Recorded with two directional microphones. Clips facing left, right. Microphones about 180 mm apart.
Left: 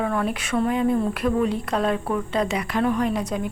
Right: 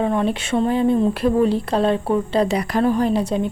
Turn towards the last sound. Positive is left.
turn(degrees=-30)  # may be behind; listen again after turning